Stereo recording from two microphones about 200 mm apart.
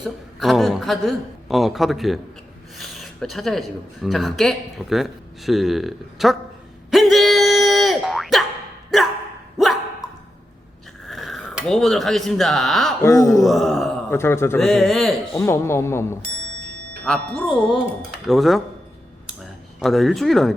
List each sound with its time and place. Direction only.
0.0 s a man's voice: centre (ahead or behind)
6.9 s boing: centre (ahead or behind)
11.1 s speech: centre (ahead or behind)
13.0 s a woman's voice: 15° left (ahead or behind)
13.4 s speech: centre (ahead or behind)
14.2 s a woman's voice: 10° left (ahead or behind)
14.6 s speech: centre (ahead or behind)
15.4 s a woman's voice: 15° left (ahead or behind)
17.4 s speech: 25° left (ahead or behind)
18.3 s speech: centre (ahead or behind)
19.8 s speech: centre (ahead or behind)